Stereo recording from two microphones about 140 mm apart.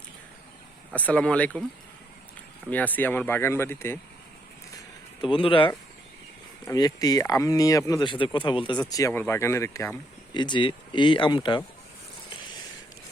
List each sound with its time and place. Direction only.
0.9 s speech: 10° left (ahead or behind)
2.6 s speech: 10° left (ahead or behind)
5.2 s speech: 35° left (ahead or behind)
6.7 s speech: 25° left (ahead or behind)
8.1 s speech: 35° left (ahead or behind); by 10.0 s 20° left (ahead or behind)
10.3 s speech: 35° left (ahead or behind)